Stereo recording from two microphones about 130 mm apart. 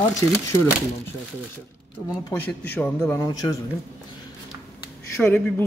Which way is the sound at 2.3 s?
15° left (ahead or behind).